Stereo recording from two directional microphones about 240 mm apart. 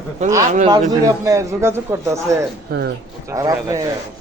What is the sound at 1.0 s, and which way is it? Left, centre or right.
A man's voice, centre.